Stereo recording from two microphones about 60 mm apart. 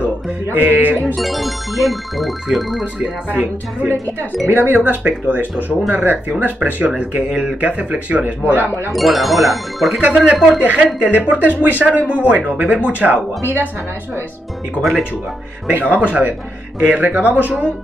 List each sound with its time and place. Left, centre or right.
0.5 s speech: right
1.1 s music: centre
3.3 s speech: right
8.9 s music: centre
10.0 s speech: right
14.8 s music: centre
15.8 s speech: right